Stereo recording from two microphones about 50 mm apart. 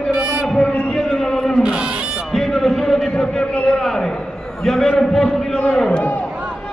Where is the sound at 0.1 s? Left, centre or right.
Centre.